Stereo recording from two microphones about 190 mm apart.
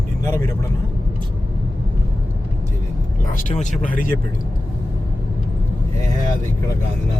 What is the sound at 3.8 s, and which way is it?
Speech, 45° left (ahead or behind).